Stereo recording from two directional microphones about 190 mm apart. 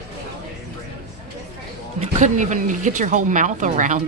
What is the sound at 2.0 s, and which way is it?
Speech, 40° right (ahead or behind).